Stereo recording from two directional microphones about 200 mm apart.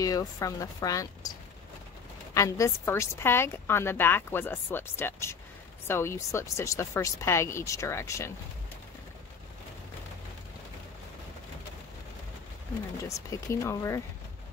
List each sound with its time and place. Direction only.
0.0 s a woman's voice: 15° left (ahead or behind)
2.3 s a woman's voice: 15° left (ahead or behind)
13.1 s a woman's voice: 15° left (ahead or behind)